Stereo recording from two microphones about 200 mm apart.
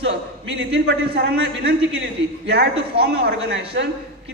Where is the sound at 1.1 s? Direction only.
55° right (ahead or behind).